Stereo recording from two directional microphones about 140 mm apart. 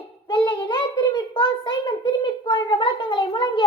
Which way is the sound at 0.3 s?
35° left (ahead or behind).